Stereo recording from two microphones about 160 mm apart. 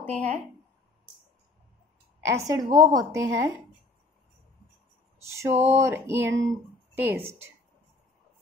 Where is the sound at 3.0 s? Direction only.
20° right (ahead or behind).